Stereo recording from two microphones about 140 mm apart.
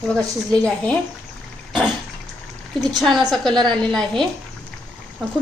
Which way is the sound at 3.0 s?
Centre (ahead or behind).